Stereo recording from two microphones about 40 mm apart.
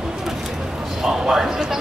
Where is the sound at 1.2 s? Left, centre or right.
Centre.